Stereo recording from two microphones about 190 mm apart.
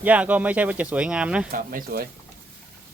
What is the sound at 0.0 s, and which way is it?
Speech, 10° right (ahead or behind).